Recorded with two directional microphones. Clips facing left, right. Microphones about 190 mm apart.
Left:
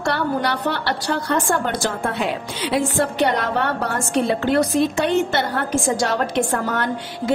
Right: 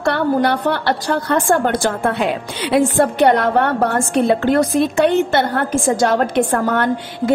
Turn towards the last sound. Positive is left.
turn(degrees=-55)  # may be behind; listen again after turning